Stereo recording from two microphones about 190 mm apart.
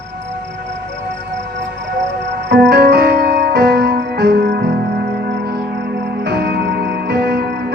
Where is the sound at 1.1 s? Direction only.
70° right (ahead or behind).